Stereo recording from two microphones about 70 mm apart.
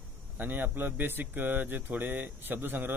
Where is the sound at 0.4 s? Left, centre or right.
Right.